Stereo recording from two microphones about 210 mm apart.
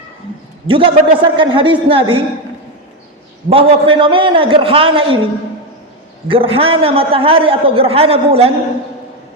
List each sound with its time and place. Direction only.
0.7 s a man's voice: 25° right (ahead or behind)
3.5 s a man's voice: 25° right (ahead or behind)
6.2 s a man's voice: 25° right (ahead or behind)